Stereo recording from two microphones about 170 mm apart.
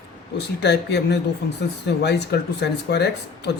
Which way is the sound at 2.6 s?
75° left (ahead or behind).